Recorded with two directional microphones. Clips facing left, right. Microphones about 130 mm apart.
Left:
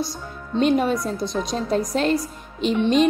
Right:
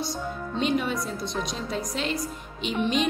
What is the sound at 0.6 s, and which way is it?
A woman's voice, 45° left (ahead or behind).